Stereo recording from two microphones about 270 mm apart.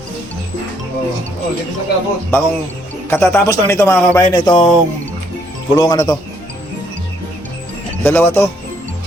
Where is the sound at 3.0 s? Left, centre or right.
Centre.